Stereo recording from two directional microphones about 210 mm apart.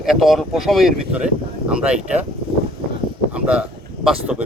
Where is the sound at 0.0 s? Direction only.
Centre (ahead or behind).